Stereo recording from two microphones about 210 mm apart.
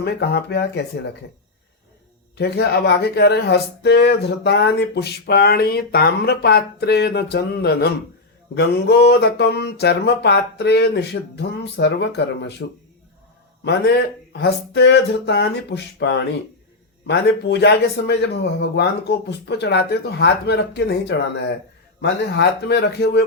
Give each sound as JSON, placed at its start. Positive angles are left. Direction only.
{"t": 0.0, "sound": "speech", "side_deg": 50}
{"t": 2.4, "sound": "speech", "side_deg": 50}
{"t": 13.7, "sound": "speech", "side_deg": 50}